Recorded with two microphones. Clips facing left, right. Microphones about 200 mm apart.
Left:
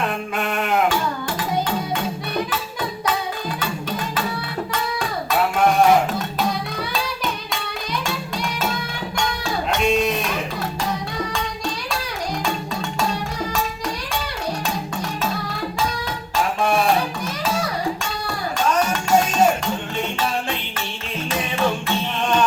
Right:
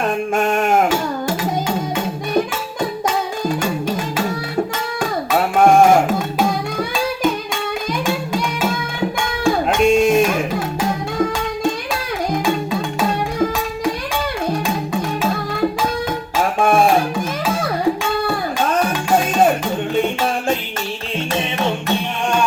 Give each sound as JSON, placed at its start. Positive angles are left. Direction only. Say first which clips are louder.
{"t": 0.3, "sound": "sheep", "louder": "right 5 dB", "side_deg": -45}
{"t": 5.4, "sound": "music", "louder": "right 5 dB", "side_deg": -50}
{"t": 16.4, "sound": "music", "louder": "right 5 dB", "side_deg": -50}
{"t": 21.3, "sound": "music", "louder": "even", "side_deg": -20}